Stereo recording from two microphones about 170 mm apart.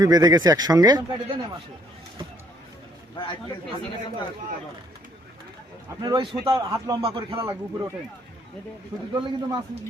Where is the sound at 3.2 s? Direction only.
25° left (ahead or behind).